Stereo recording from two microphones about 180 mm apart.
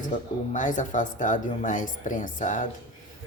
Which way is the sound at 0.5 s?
45° left (ahead or behind).